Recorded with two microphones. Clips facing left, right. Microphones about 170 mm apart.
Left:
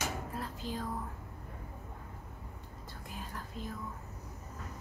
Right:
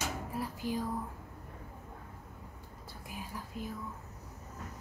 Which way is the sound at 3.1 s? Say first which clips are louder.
Right 1 dB; 10° right (ahead or behind).